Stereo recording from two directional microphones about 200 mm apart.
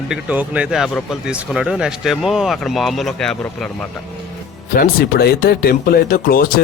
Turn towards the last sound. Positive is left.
turn(degrees=45)  # may be behind; listen again after turning